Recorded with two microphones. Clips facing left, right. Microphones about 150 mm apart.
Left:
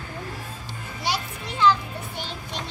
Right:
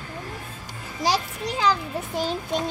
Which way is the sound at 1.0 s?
40° right (ahead or behind).